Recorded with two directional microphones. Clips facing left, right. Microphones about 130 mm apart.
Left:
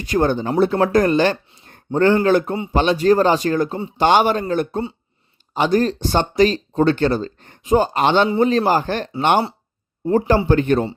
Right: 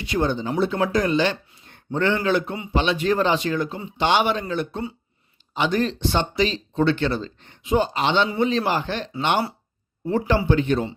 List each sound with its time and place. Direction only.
0.0 s a man's voice: 45° left (ahead or behind)